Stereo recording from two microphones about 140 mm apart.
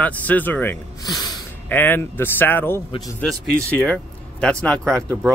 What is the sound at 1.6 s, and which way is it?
Speech, 15° left (ahead or behind).